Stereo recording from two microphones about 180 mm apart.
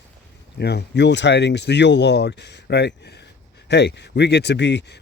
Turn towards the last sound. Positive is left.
turn(degrees=75)  # may be behind; listen again after turning